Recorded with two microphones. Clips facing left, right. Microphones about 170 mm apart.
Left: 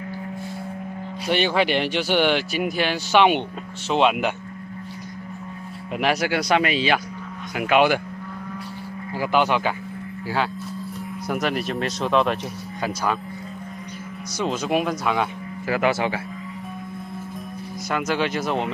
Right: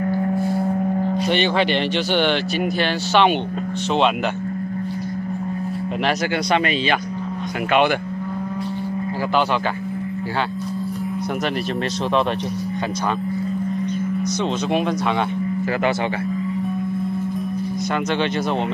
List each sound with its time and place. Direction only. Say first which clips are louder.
1.2 s speech: left 1 dB; 5° left (ahead or behind)
6.0 s speech: left 1 dB; 10° left (ahead or behind)
9.3 s speech: even; 15° left (ahead or behind)
14.4 s speech: left 1 dB; 5° left (ahead or behind)